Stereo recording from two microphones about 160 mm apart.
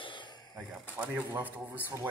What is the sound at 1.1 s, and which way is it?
Speech, 10° right (ahead or behind).